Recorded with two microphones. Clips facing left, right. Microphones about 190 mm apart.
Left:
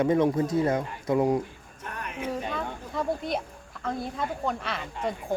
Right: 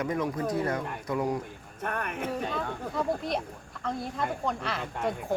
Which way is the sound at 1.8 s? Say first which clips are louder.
Right 3 dB; 55° right (ahead or behind).